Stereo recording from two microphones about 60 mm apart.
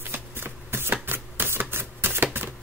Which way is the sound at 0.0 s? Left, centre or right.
Right.